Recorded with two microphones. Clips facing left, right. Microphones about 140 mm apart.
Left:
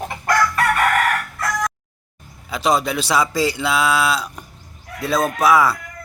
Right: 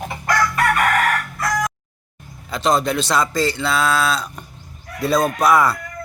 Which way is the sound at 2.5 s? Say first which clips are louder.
Right 1 dB; 10° left (ahead or behind).